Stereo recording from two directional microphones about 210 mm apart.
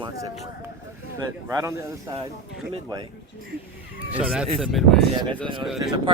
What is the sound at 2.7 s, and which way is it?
Speech, 20° right (ahead or behind).